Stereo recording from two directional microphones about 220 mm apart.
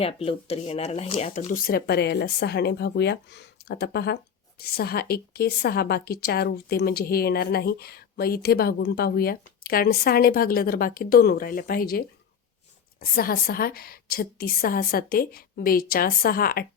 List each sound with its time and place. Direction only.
0.0 s speech: 25° left (ahead or behind); by 16.6 s 40° left (ahead or behind)